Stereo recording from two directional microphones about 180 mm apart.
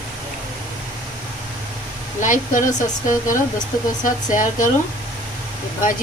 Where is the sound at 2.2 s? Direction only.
45° left (ahead or behind).